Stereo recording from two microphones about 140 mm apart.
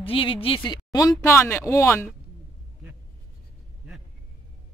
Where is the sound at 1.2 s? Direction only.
20° left (ahead or behind).